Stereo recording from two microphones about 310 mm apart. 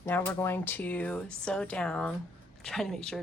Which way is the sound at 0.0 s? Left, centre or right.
Centre.